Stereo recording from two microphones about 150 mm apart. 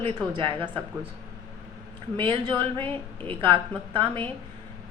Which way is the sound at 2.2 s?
35° right (ahead or behind).